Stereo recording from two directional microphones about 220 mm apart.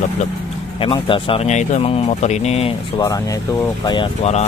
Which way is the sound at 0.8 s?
25° left (ahead or behind).